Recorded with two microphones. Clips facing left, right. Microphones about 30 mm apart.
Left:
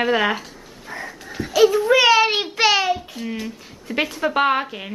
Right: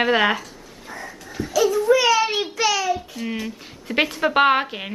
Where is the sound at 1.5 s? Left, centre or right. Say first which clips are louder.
Left 3 dB; left.